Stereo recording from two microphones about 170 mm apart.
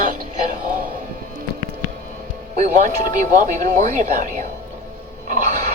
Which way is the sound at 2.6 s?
50° right (ahead or behind).